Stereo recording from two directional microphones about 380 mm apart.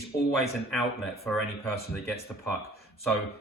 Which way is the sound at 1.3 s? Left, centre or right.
Centre.